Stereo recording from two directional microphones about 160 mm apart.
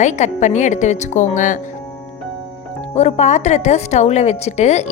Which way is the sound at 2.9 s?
45° left (ahead or behind).